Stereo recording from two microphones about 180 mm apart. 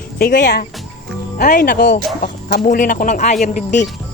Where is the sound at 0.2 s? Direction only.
55° left (ahead or behind).